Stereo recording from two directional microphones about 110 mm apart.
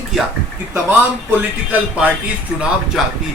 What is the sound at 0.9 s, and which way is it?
Speech, 15° right (ahead or behind).